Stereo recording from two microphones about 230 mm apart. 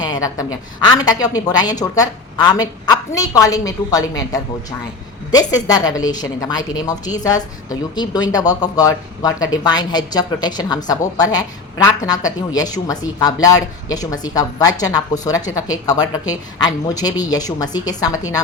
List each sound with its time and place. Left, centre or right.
0.0 s a woman's voice: centre